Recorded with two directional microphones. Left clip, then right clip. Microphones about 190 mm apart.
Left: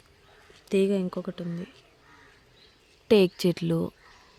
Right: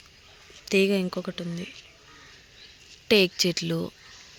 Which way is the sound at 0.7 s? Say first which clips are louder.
Right 2 dB; 5° left (ahead or behind).